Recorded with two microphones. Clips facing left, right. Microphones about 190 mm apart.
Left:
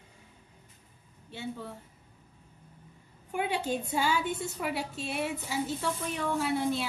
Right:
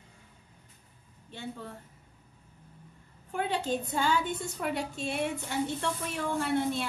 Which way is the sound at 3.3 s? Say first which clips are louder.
Even; 10° left (ahead or behind).